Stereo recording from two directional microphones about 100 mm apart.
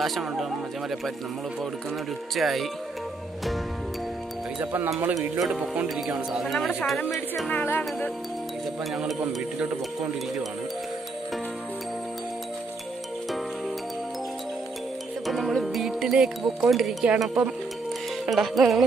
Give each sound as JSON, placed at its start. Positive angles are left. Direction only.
{"t": 0.0, "sound": "speech", "side_deg": 0}
{"t": 2.3, "sound": "speech", "side_deg": 0}
{"t": 5.4, "sound": "speech", "side_deg": -10}
{"t": 7.5, "sound": "speech", "side_deg": 20}
{"t": 15.2, "sound": "speech", "side_deg": 0}